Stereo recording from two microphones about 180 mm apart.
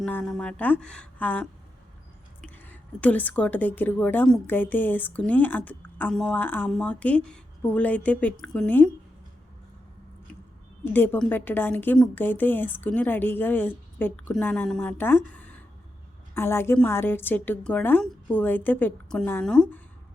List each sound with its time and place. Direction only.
0.0 s a woman's voice: 5° left (ahead or behind)
10.9 s a woman's voice: 10° left (ahead or behind)